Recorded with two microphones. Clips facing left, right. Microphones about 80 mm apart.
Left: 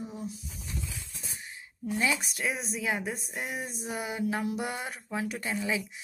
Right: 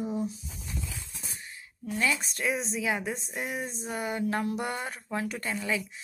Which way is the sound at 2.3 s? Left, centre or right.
Centre.